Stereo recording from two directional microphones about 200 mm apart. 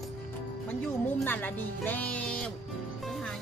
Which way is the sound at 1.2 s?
10° left (ahead or behind).